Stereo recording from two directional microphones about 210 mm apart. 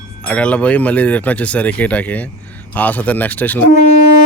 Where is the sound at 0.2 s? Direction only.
5° left (ahead or behind).